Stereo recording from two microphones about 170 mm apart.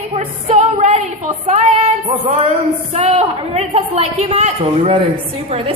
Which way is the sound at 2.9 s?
40° right (ahead or behind).